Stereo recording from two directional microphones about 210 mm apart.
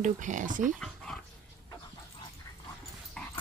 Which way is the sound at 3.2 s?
5° left (ahead or behind).